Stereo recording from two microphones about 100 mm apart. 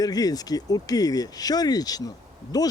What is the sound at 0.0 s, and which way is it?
Speech, 40° left (ahead or behind).